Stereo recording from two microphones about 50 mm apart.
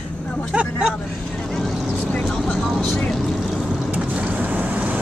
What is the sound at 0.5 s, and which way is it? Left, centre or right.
Speech, right.